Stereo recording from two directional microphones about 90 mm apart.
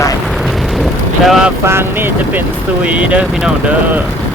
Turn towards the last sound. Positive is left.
turn(degrees=-15)  # may be behind; listen again after turning